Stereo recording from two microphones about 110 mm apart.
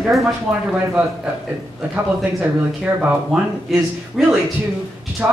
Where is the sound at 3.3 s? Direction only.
Centre (ahead or behind).